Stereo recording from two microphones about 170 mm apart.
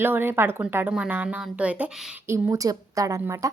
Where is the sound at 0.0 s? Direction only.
10° right (ahead or behind).